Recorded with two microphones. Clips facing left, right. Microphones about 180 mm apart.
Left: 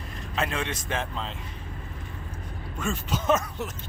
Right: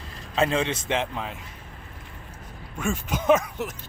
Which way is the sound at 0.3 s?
30° right (ahead or behind).